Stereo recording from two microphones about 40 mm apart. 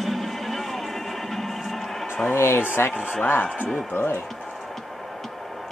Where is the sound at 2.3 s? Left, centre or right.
Left.